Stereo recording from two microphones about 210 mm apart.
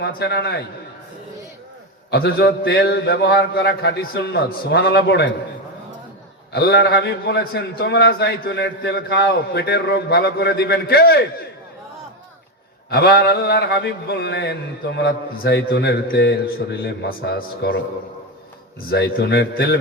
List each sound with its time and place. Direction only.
0.0 s a man's voice: 50° left (ahead or behind)
2.0 s a man's voice: 50° left (ahead or behind)
6.5 s a man's voice: 50° left (ahead or behind)
12.9 s a man's voice: 50° left (ahead or behind)
18.9 s a man's voice: 50° left (ahead or behind)